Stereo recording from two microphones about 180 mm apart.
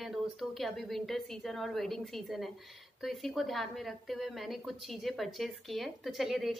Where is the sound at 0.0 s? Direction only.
Centre (ahead or behind).